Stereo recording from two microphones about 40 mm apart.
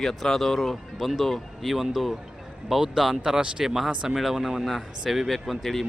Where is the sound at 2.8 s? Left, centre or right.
Centre.